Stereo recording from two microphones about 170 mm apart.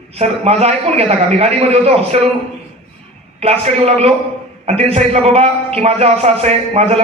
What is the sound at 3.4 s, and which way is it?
A man's voice, 35° right (ahead or behind).